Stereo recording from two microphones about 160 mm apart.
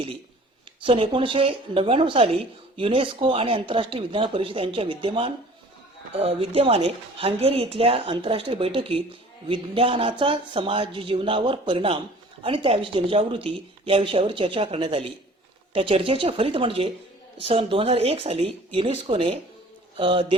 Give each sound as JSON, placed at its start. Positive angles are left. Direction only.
{"t": 0.8, "sound": "speech", "side_deg": -35}